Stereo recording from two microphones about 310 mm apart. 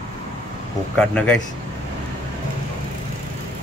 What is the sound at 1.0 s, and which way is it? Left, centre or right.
Speech, centre.